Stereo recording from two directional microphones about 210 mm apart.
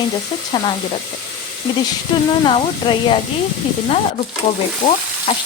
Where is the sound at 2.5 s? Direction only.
25° left (ahead or behind).